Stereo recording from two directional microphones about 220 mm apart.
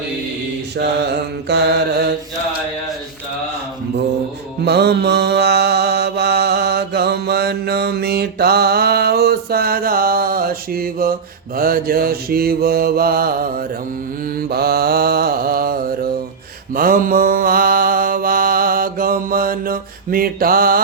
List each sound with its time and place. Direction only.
0.8 s mantra: 50° right (ahead or behind)
4.6 s mantra: 50° right (ahead or behind)